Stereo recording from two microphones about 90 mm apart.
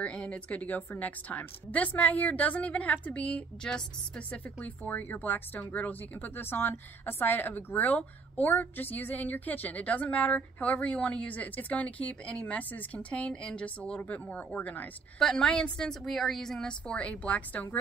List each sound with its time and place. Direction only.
0.0 s speech: 10° left (ahead or behind)